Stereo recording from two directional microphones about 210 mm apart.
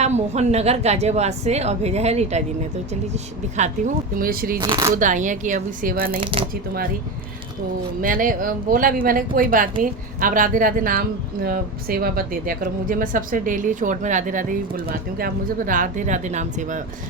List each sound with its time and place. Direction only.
0.0 s speech: 30° right (ahead or behind)
4.6 s speech: 20° right (ahead or behind)
4.9 s speech: 40° right (ahead or behind)
6.1 s speech: 25° right (ahead or behind)
8.0 s speech: 40° right (ahead or behind)